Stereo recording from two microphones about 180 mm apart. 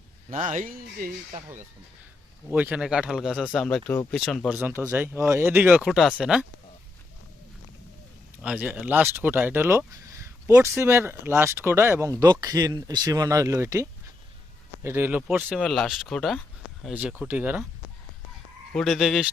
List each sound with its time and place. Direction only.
0.3 s speech: 35° right (ahead or behind)
0.6 s speech: 50° right (ahead or behind)
2.5 s speech: 10° right (ahead or behind)
4.4 s speech: 10° right (ahead or behind)
8.4 s speech: 5° right (ahead or behind)
14.8 s speech: 10° right (ahead or behind)
18.7 s speech: centre (ahead or behind)